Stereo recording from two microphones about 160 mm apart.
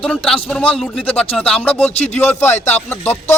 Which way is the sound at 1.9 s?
40° left (ahead or behind).